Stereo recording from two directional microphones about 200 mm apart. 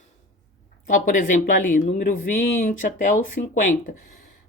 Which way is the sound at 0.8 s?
40° left (ahead or behind).